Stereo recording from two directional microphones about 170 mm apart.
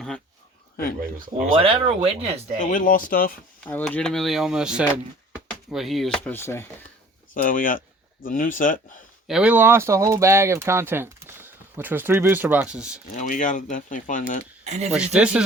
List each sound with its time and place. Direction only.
1.5 s speech: 35° right (ahead or behind)
2.6 s speech: 50° left (ahead or behind)
3.7 s speech: 10° left (ahead or behind)
6.3 s speech: 15° left (ahead or behind)
7.4 s speech: 55° left (ahead or behind)
9.2 s speech: 5° right (ahead or behind)
13.1 s speech: 50° left (ahead or behind)
14.6 s speech: 40° right (ahead or behind)
15.1 s speech: 5° right (ahead or behind)